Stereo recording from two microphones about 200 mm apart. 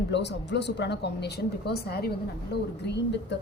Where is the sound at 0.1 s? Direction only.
60° left (ahead or behind).